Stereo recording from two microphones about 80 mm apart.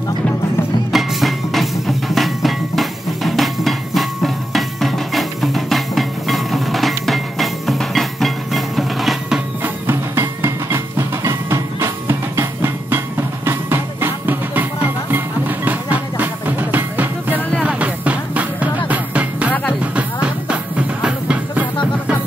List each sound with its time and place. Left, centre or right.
0.9 s music: centre
9.6 s music: right
10.4 s music: right; by 21.6 s centre